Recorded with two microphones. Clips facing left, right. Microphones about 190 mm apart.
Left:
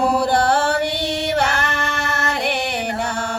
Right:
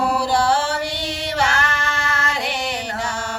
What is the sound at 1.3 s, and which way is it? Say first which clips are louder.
Female singing: left 2 dB; 60° left (ahead or behind).